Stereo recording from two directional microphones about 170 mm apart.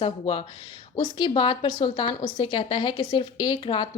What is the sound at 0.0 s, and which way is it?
A woman's voice, 30° left (ahead or behind).